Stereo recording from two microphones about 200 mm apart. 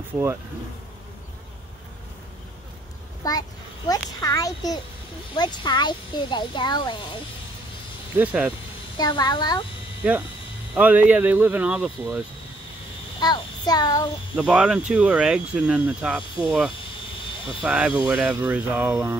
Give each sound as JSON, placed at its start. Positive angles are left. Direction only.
{"t": 3.3, "sound": "a child's voice", "side_deg": 20}
{"t": 8.2, "sound": "speech", "side_deg": -10}
{"t": 8.9, "sound": "speech", "side_deg": 20}
{"t": 10.7, "sound": "speech", "side_deg": -10}
{"t": 13.2, "sound": "a child's voice", "side_deg": 20}
{"t": 14.3, "sound": "speech", "side_deg": -5}